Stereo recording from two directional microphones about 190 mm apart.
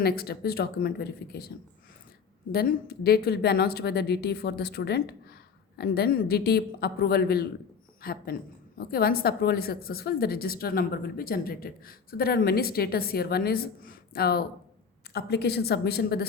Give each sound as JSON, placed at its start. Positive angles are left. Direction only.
{"t": 0.0, "sound": "a woman's voice", "side_deg": 55}